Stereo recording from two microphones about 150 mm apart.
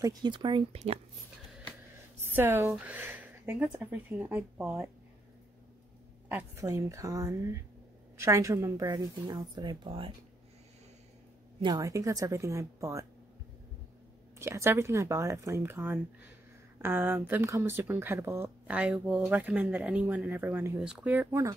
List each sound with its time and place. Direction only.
0.0 s speech: 30° right (ahead or behind)
2.2 s speech: 15° right (ahead or behind)
6.2 s a woman's voice: 10° right (ahead or behind); by 10.1 s 35° right (ahead or behind)
11.6 s a woman's voice: 25° right (ahead or behind)
14.4 s speech: 15° right (ahead or behind)